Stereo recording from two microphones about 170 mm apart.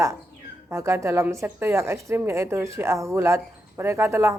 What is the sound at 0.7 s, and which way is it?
Speech, 15° right (ahead or behind).